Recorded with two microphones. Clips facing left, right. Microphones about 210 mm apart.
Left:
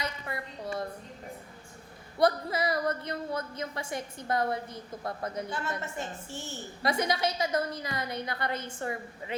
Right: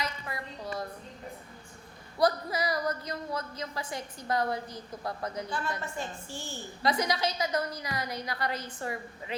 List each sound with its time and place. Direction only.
0.0 s a woman's voice: 25° left (ahead or behind)
2.1 s a woman's voice: 25° left (ahead or behind)